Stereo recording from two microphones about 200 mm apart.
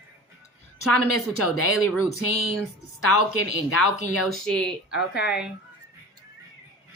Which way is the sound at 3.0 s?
90° left.